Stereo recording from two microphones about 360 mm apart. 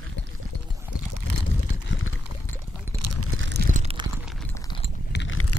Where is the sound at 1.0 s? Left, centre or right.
Right.